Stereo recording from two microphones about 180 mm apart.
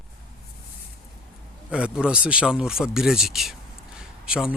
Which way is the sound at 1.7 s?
5° right (ahead or behind).